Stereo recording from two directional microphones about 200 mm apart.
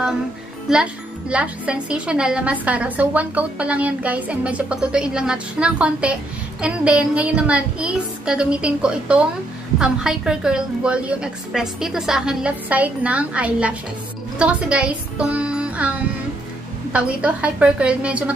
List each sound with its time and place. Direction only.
0.7 s a woman's voice: 5° right (ahead or behind)
16.9 s a woman's voice: 5° right (ahead or behind)